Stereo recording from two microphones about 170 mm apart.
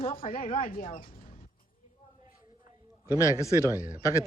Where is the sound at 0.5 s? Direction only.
55° left (ahead or behind).